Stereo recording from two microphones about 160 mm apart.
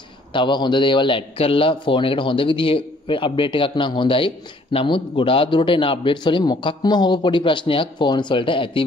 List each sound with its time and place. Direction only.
0.3 s a man's voice: 30° left (ahead or behind)